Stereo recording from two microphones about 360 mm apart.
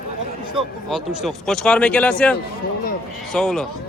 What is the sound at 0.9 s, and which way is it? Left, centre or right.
Speech, centre.